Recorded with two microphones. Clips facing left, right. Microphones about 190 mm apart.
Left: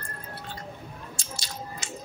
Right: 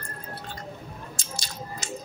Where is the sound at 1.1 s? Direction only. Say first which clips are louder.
Even; 45° right (ahead or behind).